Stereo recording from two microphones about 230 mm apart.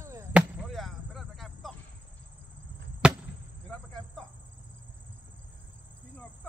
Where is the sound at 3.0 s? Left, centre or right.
Centre.